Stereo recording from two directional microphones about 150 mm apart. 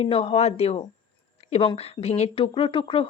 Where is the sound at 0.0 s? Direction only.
40° left (ahead or behind).